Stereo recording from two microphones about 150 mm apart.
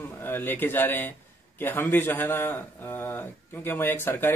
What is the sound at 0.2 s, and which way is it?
A man's voice, 15° left (ahead or behind).